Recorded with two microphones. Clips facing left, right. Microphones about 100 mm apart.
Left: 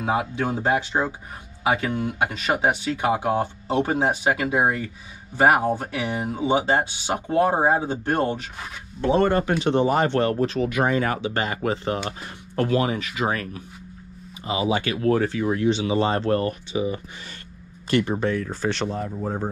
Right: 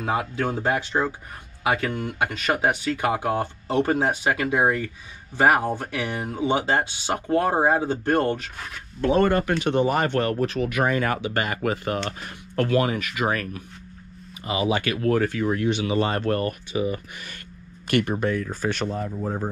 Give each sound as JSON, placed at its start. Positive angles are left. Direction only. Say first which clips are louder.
{"t": 0.0, "sound": "speech", "louder": "left 1 dB", "side_deg": 10}
{"t": 18.9, "sound": "speech", "louder": "even", "side_deg": 20}